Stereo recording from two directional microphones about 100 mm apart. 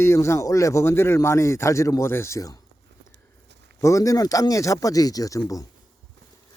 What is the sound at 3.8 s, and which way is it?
Speech, 35° left (ahead or behind).